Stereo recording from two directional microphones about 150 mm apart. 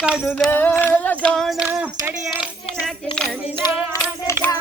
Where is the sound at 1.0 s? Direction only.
5° left (ahead or behind).